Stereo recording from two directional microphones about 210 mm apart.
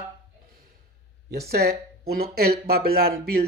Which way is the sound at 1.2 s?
45° right (ahead or behind).